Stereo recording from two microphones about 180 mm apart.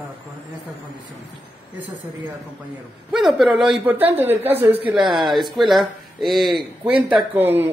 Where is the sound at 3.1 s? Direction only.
Centre (ahead or behind).